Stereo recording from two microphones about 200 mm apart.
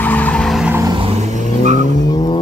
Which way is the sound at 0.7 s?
20° right (ahead or behind).